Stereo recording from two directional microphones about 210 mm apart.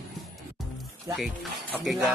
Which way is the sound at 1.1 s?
Centre (ahead or behind).